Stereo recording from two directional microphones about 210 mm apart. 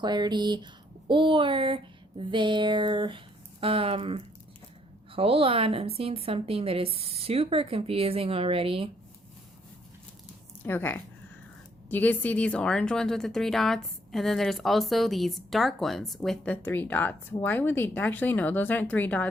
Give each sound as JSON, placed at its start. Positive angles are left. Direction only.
{"t": 0.0, "sound": "a woman's voice", "side_deg": -20}
{"t": 10.6, "sound": "speech", "side_deg": 10}